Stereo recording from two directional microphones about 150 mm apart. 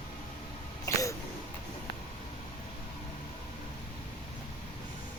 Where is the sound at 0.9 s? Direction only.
20° left (ahead or behind).